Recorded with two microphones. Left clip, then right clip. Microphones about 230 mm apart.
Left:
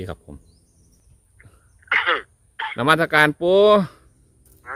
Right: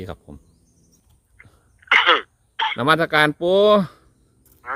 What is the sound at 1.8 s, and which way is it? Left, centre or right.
Throat clearing, right.